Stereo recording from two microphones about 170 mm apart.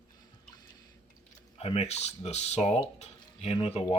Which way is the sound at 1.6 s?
35° left (ahead or behind).